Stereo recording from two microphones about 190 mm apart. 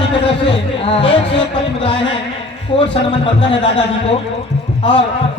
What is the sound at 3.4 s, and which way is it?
Speech, 25° left (ahead or behind).